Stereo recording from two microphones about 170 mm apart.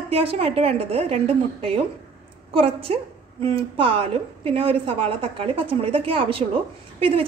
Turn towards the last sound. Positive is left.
turn(degrees=-35)  # may be behind; listen again after turning